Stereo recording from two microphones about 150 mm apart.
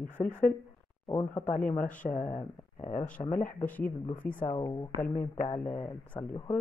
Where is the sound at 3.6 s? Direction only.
10° left (ahead or behind).